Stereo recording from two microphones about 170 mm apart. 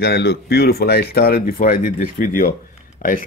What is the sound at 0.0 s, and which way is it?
Speech, 70° left (ahead or behind).